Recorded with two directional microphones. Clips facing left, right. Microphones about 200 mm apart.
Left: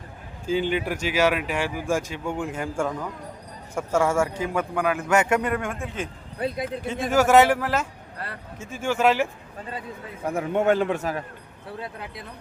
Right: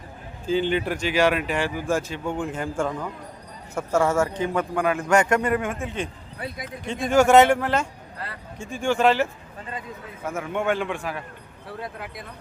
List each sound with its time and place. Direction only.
0.4 s a man's voice: 10° left (ahead or behind)
10.2 s a man's voice: 35° left (ahead or behind)